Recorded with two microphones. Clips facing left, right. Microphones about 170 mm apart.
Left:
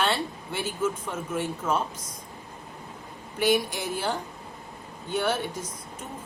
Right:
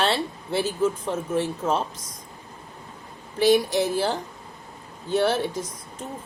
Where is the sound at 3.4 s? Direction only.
35° right (ahead or behind).